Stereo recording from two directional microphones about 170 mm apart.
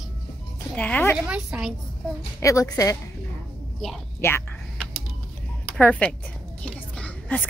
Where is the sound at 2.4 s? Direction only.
20° left (ahead or behind).